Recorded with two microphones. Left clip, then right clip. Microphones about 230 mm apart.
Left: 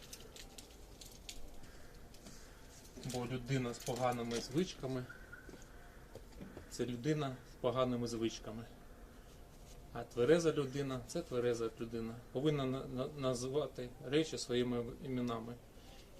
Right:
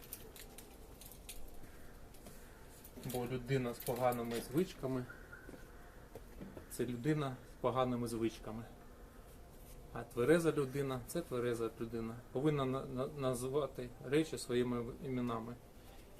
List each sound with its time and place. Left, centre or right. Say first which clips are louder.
3.2 s speech: right 2 dB; left
6.7 s a man's voice: even; centre
9.9 s a man's voice: left 1 dB; centre